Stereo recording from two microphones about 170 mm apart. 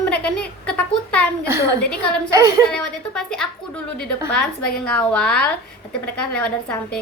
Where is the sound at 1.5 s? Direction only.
15° right (ahead or behind).